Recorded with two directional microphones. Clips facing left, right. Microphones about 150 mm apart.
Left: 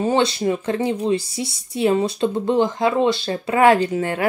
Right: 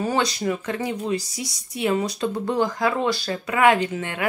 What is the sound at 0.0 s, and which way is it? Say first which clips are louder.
Speech: left 5 dB; 25° left (ahead or behind).